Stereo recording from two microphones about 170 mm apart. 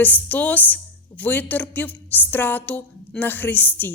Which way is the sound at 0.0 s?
10° left (ahead or behind).